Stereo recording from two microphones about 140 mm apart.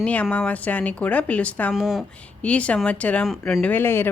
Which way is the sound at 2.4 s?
10° left (ahead or behind).